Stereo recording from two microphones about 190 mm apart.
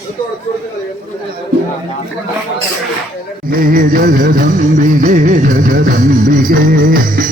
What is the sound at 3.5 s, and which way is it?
Music, 50° right (ahead or behind).